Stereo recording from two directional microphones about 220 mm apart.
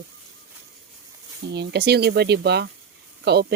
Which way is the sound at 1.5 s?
50° right (ahead or behind).